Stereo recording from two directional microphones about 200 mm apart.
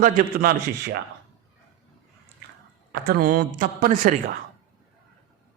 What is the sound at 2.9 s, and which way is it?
Speech, 50° right (ahead or behind).